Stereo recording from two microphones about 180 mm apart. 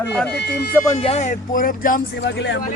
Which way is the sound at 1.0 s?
35° left (ahead or behind).